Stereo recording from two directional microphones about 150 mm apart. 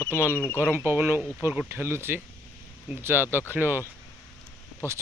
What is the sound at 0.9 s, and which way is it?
Speech, 15° right (ahead or behind).